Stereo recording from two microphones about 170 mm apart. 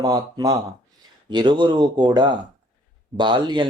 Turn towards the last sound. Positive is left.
turn(degrees=-25)  # may be behind; listen again after turning